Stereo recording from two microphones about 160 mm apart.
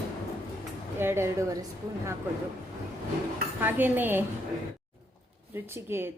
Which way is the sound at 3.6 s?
10° right (ahead or behind).